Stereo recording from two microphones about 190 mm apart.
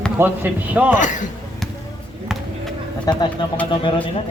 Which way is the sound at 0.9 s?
40° left (ahead or behind).